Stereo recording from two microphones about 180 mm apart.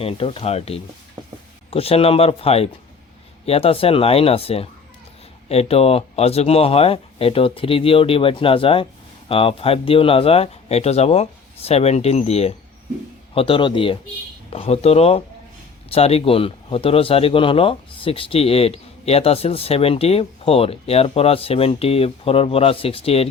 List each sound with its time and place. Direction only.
0.0 s speech: 30° left (ahead or behind)